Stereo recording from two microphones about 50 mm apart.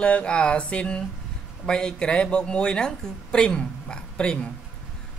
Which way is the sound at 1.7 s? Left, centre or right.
Centre.